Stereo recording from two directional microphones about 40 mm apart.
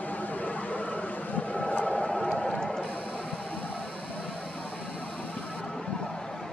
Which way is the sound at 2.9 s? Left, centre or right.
Left.